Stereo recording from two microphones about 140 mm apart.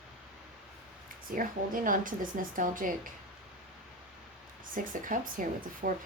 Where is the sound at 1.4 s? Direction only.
75° right (ahead or behind).